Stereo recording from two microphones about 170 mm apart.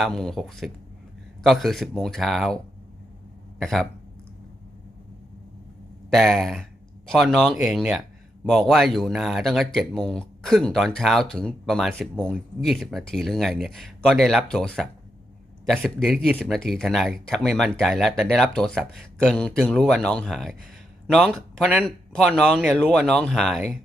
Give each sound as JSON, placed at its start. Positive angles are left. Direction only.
{"t": 0.0, "sound": "speech", "side_deg": 5}
{"t": 3.6, "sound": "speech", "side_deg": 0}
{"t": 6.1, "sound": "speech", "side_deg": 0}